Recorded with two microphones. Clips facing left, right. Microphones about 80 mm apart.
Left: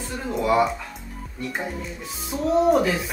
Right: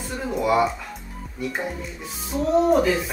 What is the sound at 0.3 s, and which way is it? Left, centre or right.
Music, centre.